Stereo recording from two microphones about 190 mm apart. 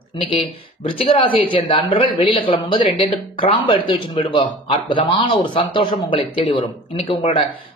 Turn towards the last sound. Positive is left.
turn(degrees=30)  # may be behind; listen again after turning